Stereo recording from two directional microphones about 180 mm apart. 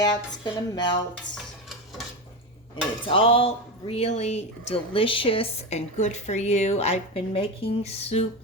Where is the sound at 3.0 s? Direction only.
30° left (ahead or behind).